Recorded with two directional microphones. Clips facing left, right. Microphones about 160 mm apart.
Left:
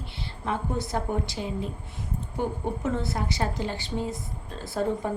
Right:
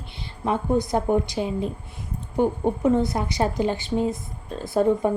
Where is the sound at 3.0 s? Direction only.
15° right (ahead or behind).